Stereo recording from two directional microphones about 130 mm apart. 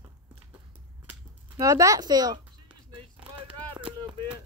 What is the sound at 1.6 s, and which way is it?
Speech, 25° right (ahead or behind).